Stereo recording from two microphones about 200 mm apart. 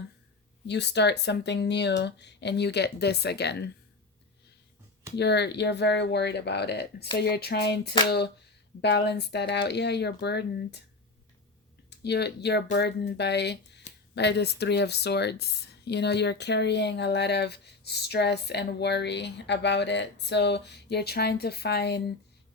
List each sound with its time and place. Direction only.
0.7 s speech: 60° left (ahead or behind)
5.1 s speech: 55° left (ahead or behind)
11.9 s speech: 55° left (ahead or behind)